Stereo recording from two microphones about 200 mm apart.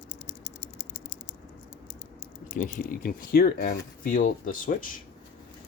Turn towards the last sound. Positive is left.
turn(degrees=40)  # may be behind; listen again after turning